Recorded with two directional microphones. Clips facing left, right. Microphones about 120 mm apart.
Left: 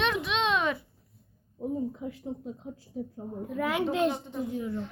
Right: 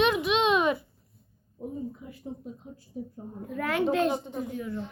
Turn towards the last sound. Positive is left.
turn(degrees=20)  # may be behind; listen again after turning